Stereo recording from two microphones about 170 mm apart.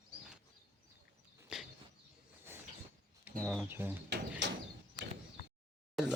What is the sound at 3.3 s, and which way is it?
Bird, 10° right (ahead or behind).